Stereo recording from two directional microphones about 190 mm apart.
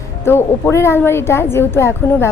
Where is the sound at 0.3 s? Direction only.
15° left (ahead or behind).